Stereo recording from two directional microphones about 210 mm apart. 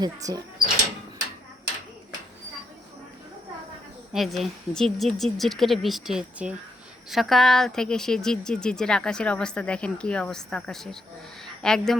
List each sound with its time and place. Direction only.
0.0 s speech: 15° right (ahead or behind)
4.1 s a woman's voice: centre (ahead or behind)